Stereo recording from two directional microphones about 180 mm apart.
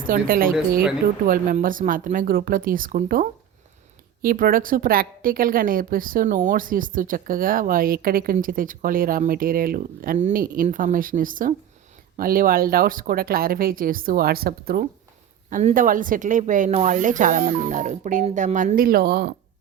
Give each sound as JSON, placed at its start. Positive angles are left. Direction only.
{"t": 0.1, "sound": "a woman's voice", "side_deg": -50}